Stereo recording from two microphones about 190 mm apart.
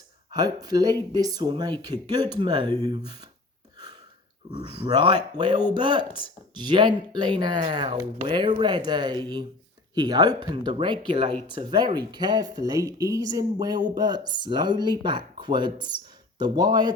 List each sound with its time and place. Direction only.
0.3 s speech: 20° right (ahead or behind)
4.9 s speech: 20° right (ahead or behind)